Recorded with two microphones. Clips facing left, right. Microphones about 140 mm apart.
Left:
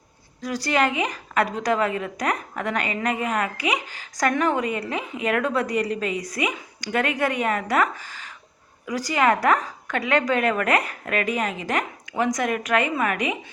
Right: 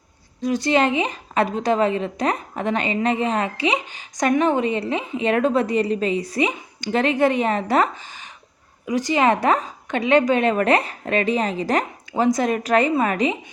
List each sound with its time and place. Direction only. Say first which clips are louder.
0.4 s a woman's voice: right 4 dB; 20° right (ahead or behind)